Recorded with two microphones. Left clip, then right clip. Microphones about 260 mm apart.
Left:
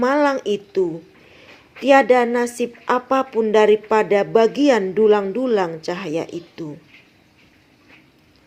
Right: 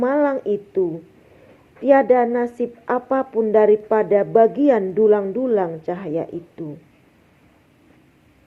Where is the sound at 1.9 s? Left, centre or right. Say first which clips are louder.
Left 1 dB; left.